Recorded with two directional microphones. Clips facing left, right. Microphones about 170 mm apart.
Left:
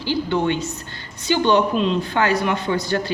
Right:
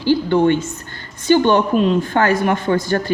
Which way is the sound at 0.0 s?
50° right (ahead or behind).